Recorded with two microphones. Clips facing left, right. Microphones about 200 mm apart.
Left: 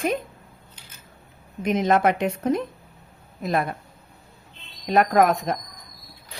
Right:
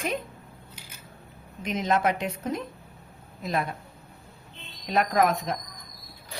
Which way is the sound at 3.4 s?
55° left (ahead or behind).